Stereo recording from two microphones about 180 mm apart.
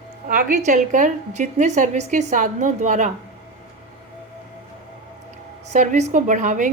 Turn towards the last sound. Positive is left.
turn(degrees=-45)  # may be behind; listen again after turning